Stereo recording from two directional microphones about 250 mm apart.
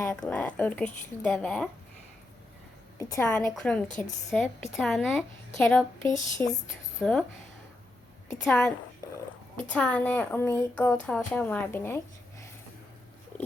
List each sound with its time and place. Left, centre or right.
0.0 s speech: centre
3.0 s speech: centre
6.1 s speech: centre
7.0 s speech: centre
8.4 s speech: centre